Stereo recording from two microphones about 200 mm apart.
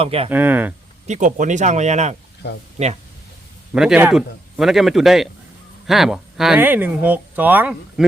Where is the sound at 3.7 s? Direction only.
5° right (ahead or behind).